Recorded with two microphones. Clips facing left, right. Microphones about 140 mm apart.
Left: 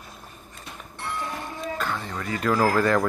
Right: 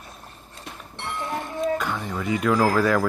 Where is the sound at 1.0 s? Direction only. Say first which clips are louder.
Right 2 dB; 20° right (ahead or behind).